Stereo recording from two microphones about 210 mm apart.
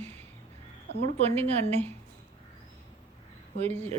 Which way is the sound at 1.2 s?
30° right (ahead or behind).